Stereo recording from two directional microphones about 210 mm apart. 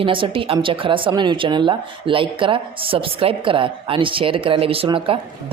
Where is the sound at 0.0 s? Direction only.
25° right (ahead or behind).